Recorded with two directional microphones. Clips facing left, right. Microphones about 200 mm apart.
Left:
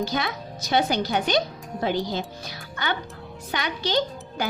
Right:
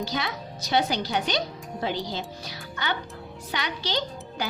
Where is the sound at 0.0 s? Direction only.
50° left (ahead or behind).